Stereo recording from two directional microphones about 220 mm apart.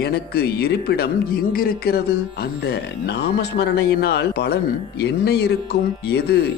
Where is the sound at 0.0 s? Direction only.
45° left (ahead or behind).